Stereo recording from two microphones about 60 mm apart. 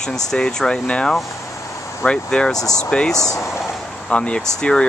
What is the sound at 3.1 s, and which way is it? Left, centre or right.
Speech, left.